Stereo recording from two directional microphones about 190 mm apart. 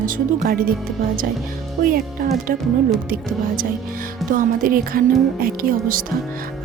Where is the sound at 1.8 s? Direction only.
50° right (ahead or behind).